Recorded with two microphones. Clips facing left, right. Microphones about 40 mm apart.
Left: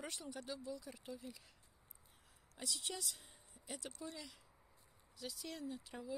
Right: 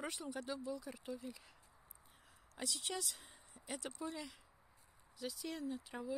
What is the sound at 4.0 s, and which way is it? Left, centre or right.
Speech, right.